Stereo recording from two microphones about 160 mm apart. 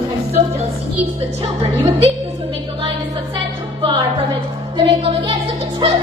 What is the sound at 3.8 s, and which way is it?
Music, 30° right (ahead or behind).